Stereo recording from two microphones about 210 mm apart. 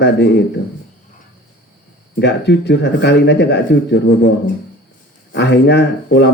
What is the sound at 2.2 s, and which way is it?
Speech, 55° left (ahead or behind).